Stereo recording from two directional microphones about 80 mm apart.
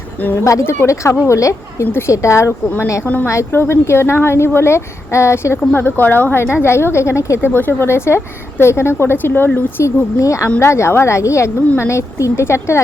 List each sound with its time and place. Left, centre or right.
0.2 s speech: left
9.8 s speech: left